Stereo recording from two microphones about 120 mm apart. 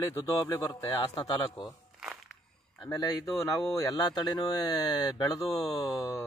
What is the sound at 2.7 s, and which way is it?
Speech, 30° left (ahead or behind).